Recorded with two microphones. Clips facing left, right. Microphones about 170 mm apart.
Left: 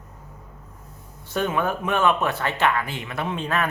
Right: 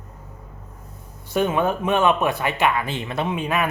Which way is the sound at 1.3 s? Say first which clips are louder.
Right 3 dB; 20° right (ahead or behind).